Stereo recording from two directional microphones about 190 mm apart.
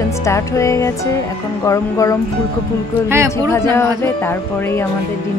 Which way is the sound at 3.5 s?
15° left (ahead or behind).